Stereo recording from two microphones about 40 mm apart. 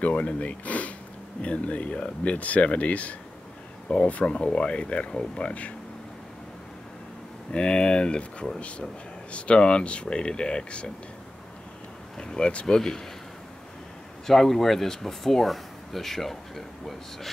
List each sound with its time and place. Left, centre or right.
0.0 s speech: left
5.1 s speech: centre
7.5 s speech: left
12.2 s speech: left
14.2 s speech: centre